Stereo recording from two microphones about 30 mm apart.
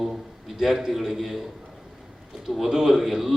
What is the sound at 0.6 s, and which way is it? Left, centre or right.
Speech, centre.